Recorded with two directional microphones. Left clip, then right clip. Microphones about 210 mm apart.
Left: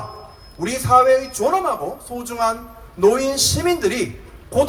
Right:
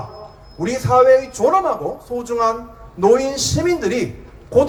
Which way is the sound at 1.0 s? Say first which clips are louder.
Right 3 dB; 30° left (ahead or behind).